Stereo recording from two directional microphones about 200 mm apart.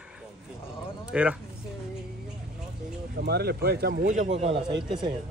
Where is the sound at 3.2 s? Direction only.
55° right (ahead or behind).